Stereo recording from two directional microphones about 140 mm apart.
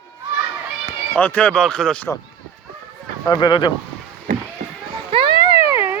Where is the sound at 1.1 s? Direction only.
10° left (ahead or behind).